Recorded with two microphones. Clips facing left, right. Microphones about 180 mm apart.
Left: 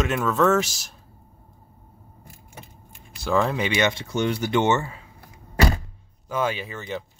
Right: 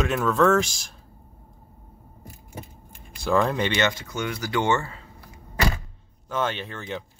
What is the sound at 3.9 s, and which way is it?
Speech, 30° left (ahead or behind).